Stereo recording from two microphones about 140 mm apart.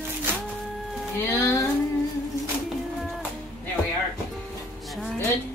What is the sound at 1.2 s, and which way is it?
Speech, 20° left (ahead or behind).